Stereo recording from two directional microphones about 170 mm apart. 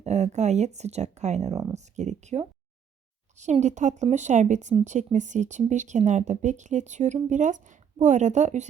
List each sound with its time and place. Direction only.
0.0 s speech: 40° right (ahead or behind)